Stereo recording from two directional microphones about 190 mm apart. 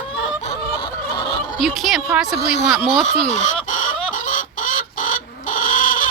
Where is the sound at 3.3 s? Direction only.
40° left (ahead or behind).